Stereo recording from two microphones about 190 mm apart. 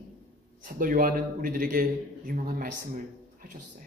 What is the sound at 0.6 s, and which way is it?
Speech, 45° right (ahead or behind).